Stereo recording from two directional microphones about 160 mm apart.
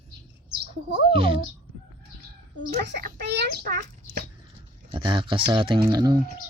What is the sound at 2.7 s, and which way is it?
A child's voice, 85° right.